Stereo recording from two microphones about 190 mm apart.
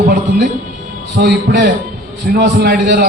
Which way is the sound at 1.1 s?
60° right (ahead or behind).